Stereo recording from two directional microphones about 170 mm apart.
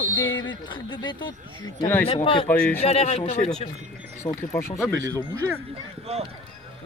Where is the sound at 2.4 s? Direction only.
10° left (ahead or behind).